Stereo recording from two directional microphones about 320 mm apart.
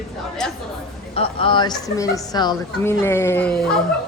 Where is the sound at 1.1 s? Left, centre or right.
Centre.